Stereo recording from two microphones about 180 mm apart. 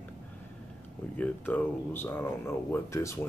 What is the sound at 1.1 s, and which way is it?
Speech, 10° left (ahead or behind).